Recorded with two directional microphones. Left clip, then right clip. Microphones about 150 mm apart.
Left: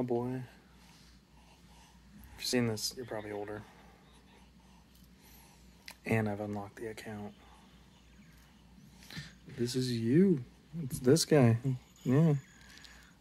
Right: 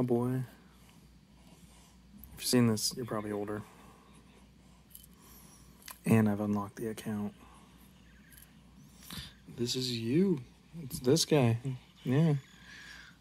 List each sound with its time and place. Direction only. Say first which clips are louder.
0.0 s speech: right 3 dB; 5° left (ahead or behind)
2.3 s speech: right 3 dB; 5° left (ahead or behind)
5.9 s speech: right 3 dB; 10° left (ahead or behind)
9.0 s a sound: right 2 dB; 20° left (ahead or behind)
9.6 s speech: even; 35° left (ahead or behind)
11.6 s a sound: left 2 dB; 10° left (ahead or behind)